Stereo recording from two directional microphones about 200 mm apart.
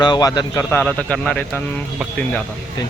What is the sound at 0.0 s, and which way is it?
Speech, 20° left (ahead or behind).